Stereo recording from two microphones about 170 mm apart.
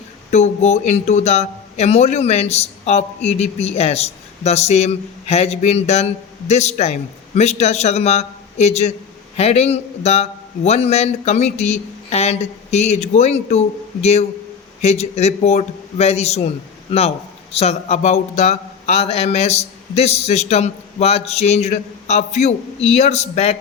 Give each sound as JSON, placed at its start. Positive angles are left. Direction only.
{"t": 0.3, "sound": "speech", "side_deg": 40}
{"t": 17.5, "sound": "speech", "side_deg": 40}